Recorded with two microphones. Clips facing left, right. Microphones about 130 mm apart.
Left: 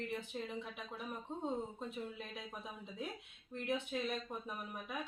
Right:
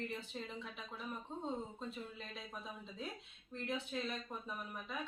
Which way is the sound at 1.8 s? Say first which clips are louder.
Left 2 dB; 15° left (ahead or behind).